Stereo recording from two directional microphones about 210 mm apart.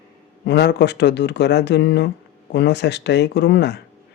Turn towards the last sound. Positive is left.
turn(degrees=55)  # may be behind; listen again after turning